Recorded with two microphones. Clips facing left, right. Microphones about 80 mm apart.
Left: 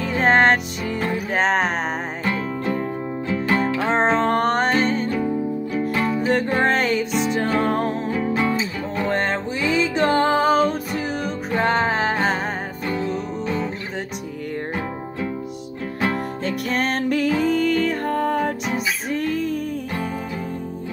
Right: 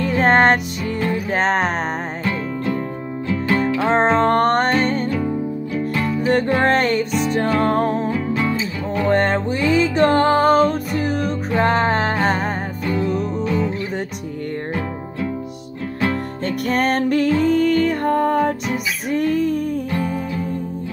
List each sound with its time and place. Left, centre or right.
0.0 s music: centre
3.7 s music: centre
5.8 s music: centre
6.2 s music: centre
8.4 s music: left
9.0 s music: centre
16.4 s music: centre